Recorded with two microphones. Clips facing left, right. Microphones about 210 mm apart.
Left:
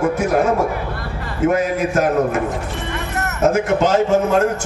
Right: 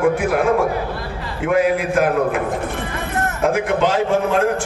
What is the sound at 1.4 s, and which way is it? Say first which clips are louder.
A man's voice: even; 45° left (ahead or behind).